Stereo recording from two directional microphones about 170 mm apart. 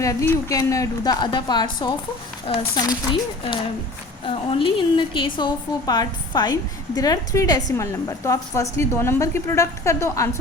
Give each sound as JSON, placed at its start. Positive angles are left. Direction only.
{"t": 0.0, "sound": "a woman's voice", "side_deg": 20}